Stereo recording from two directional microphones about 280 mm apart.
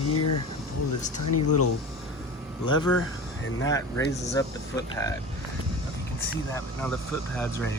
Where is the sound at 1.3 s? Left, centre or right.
Left.